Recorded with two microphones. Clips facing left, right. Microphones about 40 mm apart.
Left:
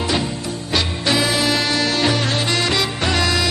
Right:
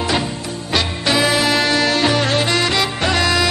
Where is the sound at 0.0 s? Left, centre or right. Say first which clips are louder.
Right 1 dB; centre.